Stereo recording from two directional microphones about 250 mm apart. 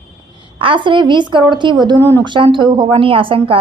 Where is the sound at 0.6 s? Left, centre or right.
Centre.